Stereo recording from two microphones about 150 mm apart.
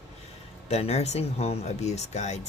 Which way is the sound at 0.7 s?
45° left (ahead or behind).